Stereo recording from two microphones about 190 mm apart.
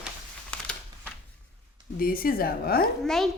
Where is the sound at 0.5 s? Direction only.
5° left (ahead or behind).